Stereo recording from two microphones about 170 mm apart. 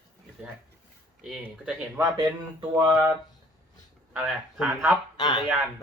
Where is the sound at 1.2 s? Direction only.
Centre (ahead or behind).